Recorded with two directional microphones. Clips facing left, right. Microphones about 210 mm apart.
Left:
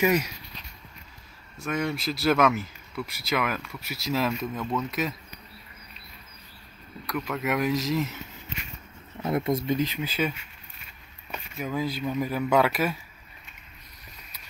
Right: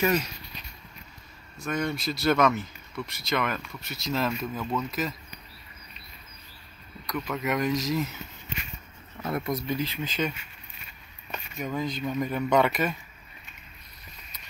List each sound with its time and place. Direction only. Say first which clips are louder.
0.0 s speech: left 2 dB; 10° left (ahead or behind)
1.6 s speech: left 1 dB; 5° left (ahead or behind)
7.1 s speech: left 1 dB; centre (ahead or behind)
9.2 s speech: left 4 dB; 25° left (ahead or behind)
10.0 s speech: left 1 dB; 5° left (ahead or behind)
11.3 s speech: left 1 dB; 5° left (ahead or behind)